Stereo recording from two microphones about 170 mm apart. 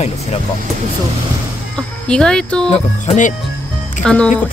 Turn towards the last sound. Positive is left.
turn(degrees=5)  # may be behind; listen again after turning